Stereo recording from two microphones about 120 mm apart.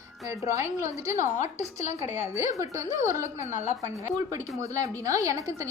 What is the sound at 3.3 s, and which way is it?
Speech, 80° left.